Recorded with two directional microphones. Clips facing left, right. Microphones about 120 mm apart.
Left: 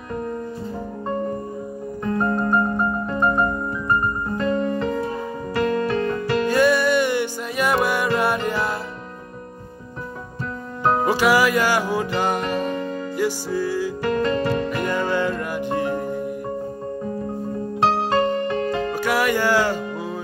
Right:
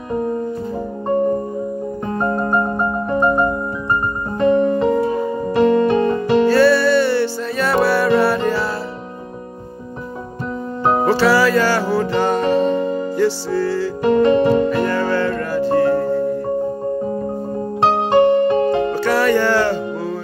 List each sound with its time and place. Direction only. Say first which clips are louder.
0.1 s music: right 7 dB; 20° right (ahead or behind)
2.0 s music: right 1 dB; 25° right (ahead or behind)
4.7 s music: right 7 dB; 25° right (ahead or behind)
6.5 s music: right 2 dB; 15° left (ahead or behind)
11.1 s music: right 4 dB; 15° left (ahead or behind)
12.7 s music: right 7 dB; 30° right (ahead or behind)
13.1 s music: right 3 dB; 10° left (ahead or behind)
14.2 s music: right 10 dB; 15° right (ahead or behind)
14.9 s music: right 4 dB; 15° left (ahead or behind)
18.1 s music: right 8 dB; 15° right (ahead or behind)
18.9 s music: right 5 dB; 10° left (ahead or behind)